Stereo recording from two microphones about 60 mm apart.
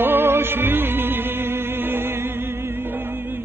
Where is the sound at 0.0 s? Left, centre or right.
Right.